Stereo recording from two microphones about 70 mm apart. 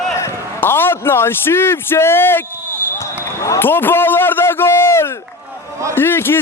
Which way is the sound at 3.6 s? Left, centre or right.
Left.